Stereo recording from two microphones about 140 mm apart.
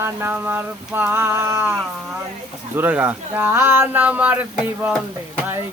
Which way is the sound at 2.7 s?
15° right (ahead or behind).